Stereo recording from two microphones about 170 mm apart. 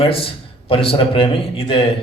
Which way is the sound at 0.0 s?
35° left (ahead or behind).